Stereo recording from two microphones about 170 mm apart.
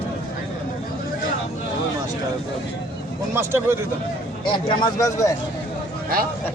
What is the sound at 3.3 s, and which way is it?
Speech, 15° right (ahead or behind).